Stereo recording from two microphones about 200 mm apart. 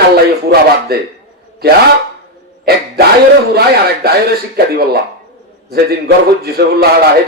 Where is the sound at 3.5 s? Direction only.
50° right (ahead or behind).